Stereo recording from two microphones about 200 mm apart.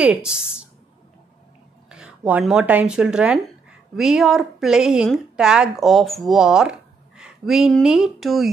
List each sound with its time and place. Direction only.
0.0 s speech: 5° right (ahead or behind)
1.9 s a woman's voice: 5° right (ahead or behind)